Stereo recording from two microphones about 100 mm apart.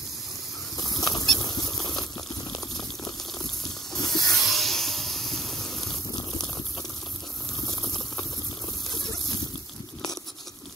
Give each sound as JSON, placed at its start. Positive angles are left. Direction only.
{"t": 1.1, "sound": "rodents", "side_deg": 5}
{"t": 2.0, "sound": "boiling", "side_deg": 40}
{"t": 3.9, "sound": "a sound", "side_deg": 5}